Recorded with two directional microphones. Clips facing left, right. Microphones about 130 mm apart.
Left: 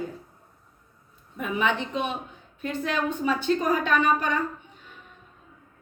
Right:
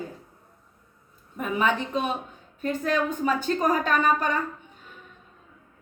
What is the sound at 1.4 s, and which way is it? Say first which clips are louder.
A woman's voice: right 1 dB; 40° right (ahead or behind).